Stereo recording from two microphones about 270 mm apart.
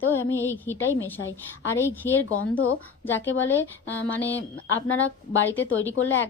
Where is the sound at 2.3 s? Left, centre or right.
Left.